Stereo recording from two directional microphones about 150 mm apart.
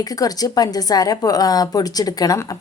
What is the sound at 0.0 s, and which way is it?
A woman's voice, 25° left (ahead or behind).